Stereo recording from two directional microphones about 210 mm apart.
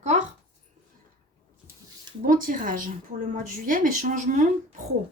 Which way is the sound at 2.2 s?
40° right (ahead or behind).